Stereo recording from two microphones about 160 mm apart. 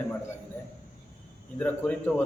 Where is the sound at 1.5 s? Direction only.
10° left (ahead or behind).